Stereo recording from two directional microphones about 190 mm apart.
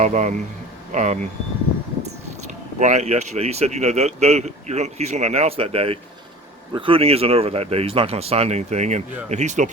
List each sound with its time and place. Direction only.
0.0 s speech: 40° right (ahead or behind)
2.7 s speech: 40° right (ahead or behind)